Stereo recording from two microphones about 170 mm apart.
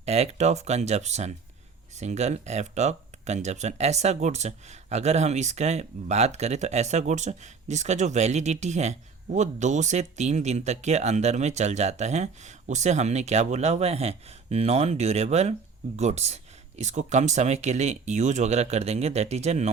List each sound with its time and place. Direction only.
0.0 s speech: 40° right (ahead or behind)